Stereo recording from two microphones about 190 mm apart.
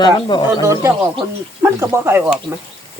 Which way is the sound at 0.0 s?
25° left (ahead or behind).